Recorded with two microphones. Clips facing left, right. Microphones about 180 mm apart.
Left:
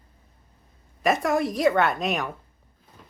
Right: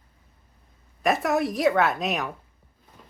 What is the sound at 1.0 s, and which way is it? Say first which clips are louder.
Speech: even; centre (ahead or behind).